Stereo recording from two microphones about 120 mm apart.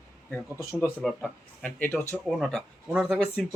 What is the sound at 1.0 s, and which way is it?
Speech, 5° left (ahead or behind).